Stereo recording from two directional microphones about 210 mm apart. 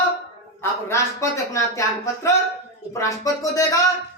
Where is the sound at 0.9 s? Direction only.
15° left (ahead or behind).